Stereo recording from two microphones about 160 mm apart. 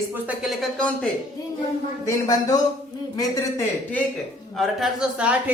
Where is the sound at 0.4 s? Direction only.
5° left (ahead or behind).